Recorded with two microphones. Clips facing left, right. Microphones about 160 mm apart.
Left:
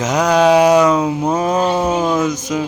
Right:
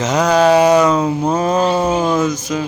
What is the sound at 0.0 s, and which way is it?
Speech, 15° left (ahead or behind).